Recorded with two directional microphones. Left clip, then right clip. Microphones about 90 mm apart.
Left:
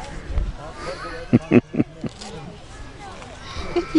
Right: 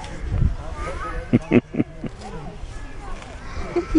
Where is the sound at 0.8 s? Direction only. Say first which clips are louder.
Even; 25° left (ahead or behind).